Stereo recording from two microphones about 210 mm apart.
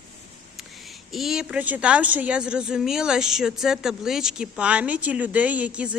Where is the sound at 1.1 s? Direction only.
Centre (ahead or behind).